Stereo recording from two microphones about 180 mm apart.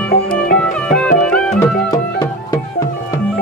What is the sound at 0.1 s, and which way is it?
Music, 55° left (ahead or behind).